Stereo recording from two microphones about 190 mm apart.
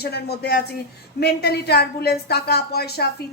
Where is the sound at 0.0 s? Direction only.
55° left (ahead or behind).